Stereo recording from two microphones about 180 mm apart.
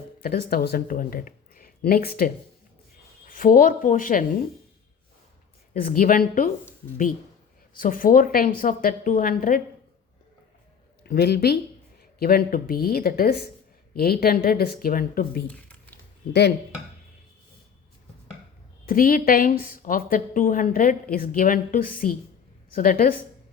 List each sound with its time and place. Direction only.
0.2 s a woman's voice: 55° left (ahead or behind)
5.7 s a woman's voice: 55° left (ahead or behind)
7.8 s a woman's voice: 50° left (ahead or behind)
11.0 s a woman's voice: 65° left (ahead or behind)
18.9 s a woman's voice: 50° left (ahead or behind)